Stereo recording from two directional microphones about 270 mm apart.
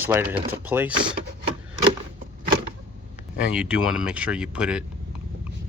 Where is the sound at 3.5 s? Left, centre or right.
Centre.